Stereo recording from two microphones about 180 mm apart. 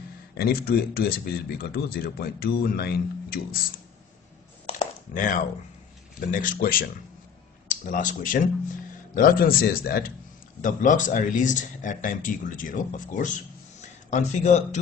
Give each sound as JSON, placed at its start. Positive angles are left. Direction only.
{"t": 0.3, "sound": "speech", "side_deg": 60}
{"t": 4.7, "sound": "a sound", "side_deg": 50}
{"t": 6.1, "sound": "speech", "side_deg": 50}